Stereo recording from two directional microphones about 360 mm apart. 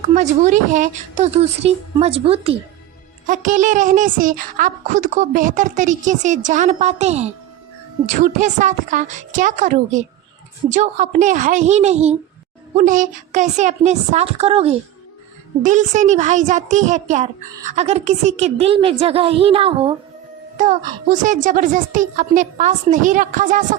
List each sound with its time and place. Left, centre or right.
0.0 s a woman's voice: centre